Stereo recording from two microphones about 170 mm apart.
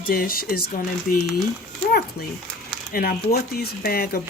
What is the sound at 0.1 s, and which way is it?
Speech, 60° left (ahead or behind).